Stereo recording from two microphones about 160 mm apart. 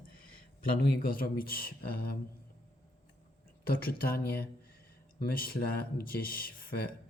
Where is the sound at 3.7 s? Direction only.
70° left (ahead or behind).